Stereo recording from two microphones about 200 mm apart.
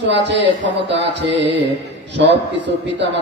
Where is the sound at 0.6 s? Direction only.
65° right (ahead or behind).